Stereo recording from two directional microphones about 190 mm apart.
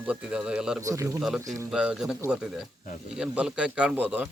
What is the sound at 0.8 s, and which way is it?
Speech, 15° right (ahead or behind).